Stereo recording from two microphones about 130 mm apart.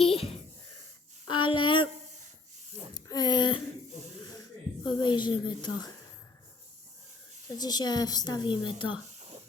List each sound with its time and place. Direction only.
0.0 s a sound: 45° left (ahead or behind)
1.3 s a woman's voice: 40° left (ahead or behind)
2.9 s speech: 30° left (ahead or behind)
4.9 s a woman's voice: 35° left (ahead or behind)
7.6 s a woman's voice: 30° left (ahead or behind)